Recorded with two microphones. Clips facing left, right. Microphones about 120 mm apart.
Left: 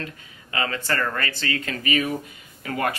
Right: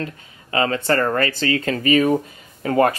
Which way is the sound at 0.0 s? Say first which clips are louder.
Right 6 dB; 35° right (ahead or behind).